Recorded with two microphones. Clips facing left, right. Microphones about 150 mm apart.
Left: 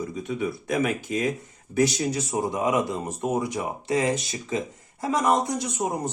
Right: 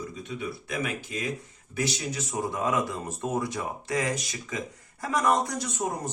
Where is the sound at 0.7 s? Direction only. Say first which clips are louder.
Left 8 dB; 45° left (ahead or behind).